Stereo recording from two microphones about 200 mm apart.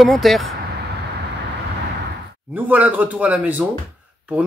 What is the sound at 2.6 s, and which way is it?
Speech, 10° right (ahead or behind).